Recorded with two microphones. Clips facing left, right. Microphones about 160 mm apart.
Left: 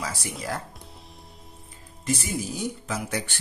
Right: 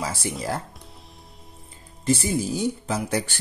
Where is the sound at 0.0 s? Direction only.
25° right (ahead or behind).